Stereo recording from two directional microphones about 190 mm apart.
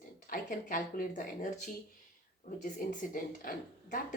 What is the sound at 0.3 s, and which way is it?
Speech, 45° left (ahead or behind).